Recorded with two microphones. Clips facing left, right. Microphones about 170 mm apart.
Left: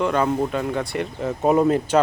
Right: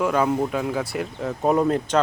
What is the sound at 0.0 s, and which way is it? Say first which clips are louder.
Speech: even; 5° right (ahead or behind).